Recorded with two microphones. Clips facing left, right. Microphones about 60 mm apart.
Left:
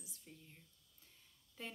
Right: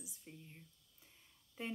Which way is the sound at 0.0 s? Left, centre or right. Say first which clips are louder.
Right 4 dB; centre.